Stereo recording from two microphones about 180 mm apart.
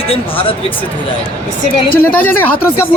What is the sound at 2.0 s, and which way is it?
Speech, 10° left (ahead or behind).